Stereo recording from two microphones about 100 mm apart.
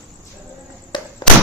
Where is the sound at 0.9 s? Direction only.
50° left (ahead or behind).